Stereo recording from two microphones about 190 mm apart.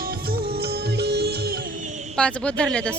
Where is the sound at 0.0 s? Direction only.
55° right (ahead or behind).